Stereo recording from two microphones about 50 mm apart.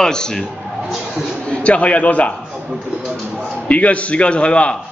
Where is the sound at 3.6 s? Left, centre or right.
Left.